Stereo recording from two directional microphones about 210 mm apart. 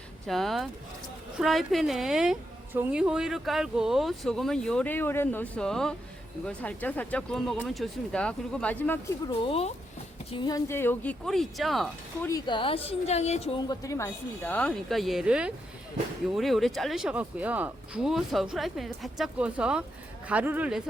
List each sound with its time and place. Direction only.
0.3 s a woman's voice: centre (ahead or behind)
9.4 s speech: 30° left (ahead or behind); by 12.3 s centre (ahead or behind)
12.3 s speech: 20° left (ahead or behind)
13.7 s a woman's voice: 15° left (ahead or behind); by 20.8 s 5° right (ahead or behind)